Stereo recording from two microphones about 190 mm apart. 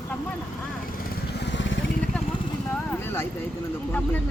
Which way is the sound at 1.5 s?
75° left (ahead or behind).